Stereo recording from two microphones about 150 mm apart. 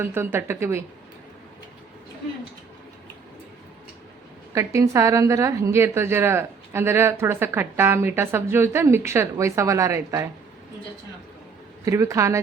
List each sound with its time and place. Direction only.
0.0 s a woman's voice: 15° right (ahead or behind)
4.5 s a woman's voice: 20° right (ahead or behind)
11.9 s speech: 20° right (ahead or behind)